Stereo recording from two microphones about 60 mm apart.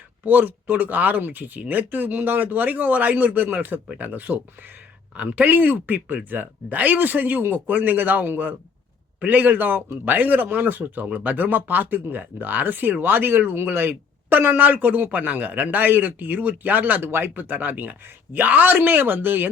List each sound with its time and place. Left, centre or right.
0.3 s speech: right